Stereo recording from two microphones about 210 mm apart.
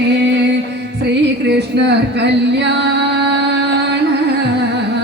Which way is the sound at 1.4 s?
55° right (ahead or behind).